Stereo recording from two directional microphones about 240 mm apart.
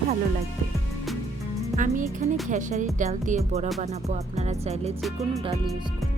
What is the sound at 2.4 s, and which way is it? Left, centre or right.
Speech, right.